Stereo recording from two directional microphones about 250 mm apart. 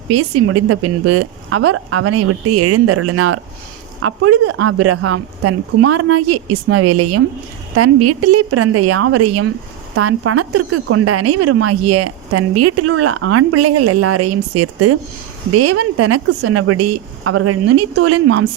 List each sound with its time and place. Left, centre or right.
0.1 s a woman's voice: right